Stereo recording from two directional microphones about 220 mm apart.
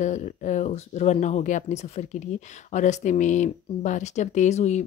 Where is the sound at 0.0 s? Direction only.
35° left (ahead or behind).